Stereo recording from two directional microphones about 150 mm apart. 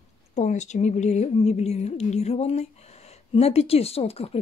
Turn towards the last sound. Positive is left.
turn(degrees=40)  # may be behind; listen again after turning